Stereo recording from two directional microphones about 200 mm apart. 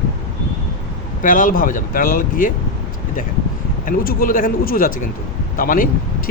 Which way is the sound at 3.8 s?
45° left (ahead or behind).